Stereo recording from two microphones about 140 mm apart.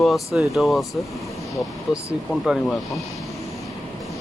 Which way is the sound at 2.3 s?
Centre (ahead or behind).